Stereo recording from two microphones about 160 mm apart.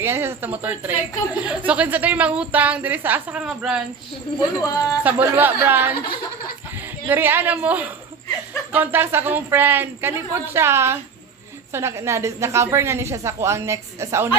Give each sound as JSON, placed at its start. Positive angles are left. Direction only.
{"t": 0.0, "sound": "a woman's voice", "side_deg": -15}
{"t": 4.4, "sound": "a woman's voice", "side_deg": 20}
{"t": 5.0, "sound": "a woman's voice", "side_deg": -10}
{"t": 7.1, "sound": "a woman's voice", "side_deg": -15}